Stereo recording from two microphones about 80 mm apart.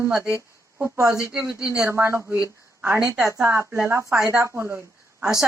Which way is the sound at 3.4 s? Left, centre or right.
Right.